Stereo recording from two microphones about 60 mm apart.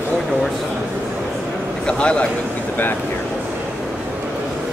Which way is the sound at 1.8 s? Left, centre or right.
Centre.